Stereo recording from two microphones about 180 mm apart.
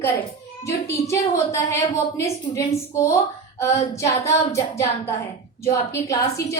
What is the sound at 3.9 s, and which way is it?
A woman's voice, 15° left (ahead or behind).